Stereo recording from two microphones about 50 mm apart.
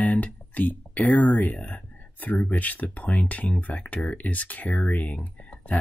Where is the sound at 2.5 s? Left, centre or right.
Left.